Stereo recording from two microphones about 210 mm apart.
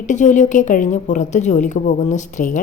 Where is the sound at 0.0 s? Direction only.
35° left (ahead or behind).